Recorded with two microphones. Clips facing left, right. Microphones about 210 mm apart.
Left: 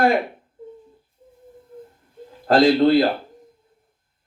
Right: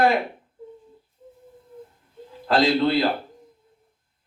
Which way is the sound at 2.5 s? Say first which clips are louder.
Left 5 dB; 45° left (ahead or behind).